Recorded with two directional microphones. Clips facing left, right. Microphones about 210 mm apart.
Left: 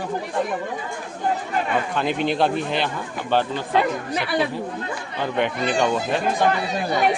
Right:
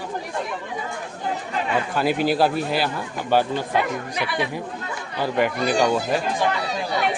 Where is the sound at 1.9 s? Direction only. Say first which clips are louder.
Right 2 dB; 5° right (ahead or behind).